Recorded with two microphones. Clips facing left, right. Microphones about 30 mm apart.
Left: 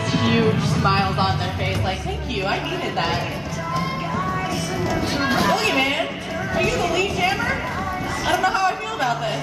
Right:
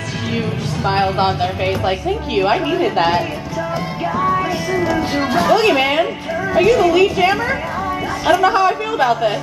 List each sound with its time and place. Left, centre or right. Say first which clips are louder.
0.1 s music: left 4 dB; centre
0.9 s a woman's voice: right 5 dB; centre
4.2 s music: right 10 dB; centre
5.3 s speech: right 6 dB; centre
5.6 s a woman's voice: right 6 dB; centre